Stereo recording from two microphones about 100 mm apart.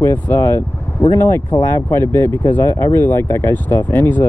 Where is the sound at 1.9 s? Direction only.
25° left (ahead or behind).